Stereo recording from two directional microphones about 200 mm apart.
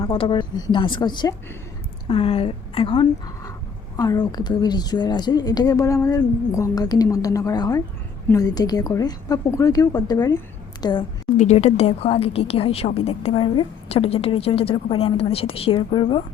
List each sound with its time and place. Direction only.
0.0 s a woman's voice: 25° left (ahead or behind)
11.3 s speech: 35° left (ahead or behind)